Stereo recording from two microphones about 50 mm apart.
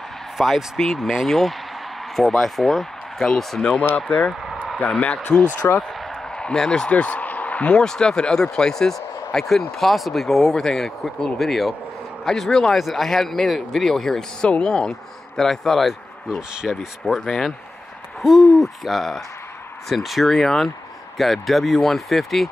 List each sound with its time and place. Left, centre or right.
0.4 s speech: centre
3.9 s speech: left
5.6 s speech: left
6.4 s a man's voice: centre
6.9 s a sound: left
7.7 s speech: centre